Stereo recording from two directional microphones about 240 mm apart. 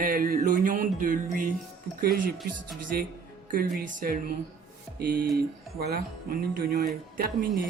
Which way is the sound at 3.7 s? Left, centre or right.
Right.